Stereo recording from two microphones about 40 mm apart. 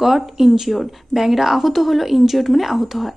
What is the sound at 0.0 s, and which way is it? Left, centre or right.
A woman's voice, centre.